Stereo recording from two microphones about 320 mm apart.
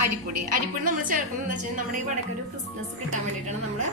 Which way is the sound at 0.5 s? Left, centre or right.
Right.